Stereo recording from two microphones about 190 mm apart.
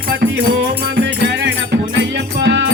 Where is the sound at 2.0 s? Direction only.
65° right (ahead or behind).